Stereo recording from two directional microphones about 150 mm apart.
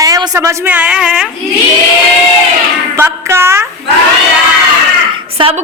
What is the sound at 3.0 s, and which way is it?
Speech, 15° right (ahead or behind).